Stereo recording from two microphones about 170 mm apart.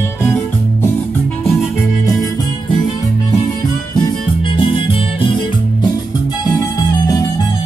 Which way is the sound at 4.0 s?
30° left (ahead or behind).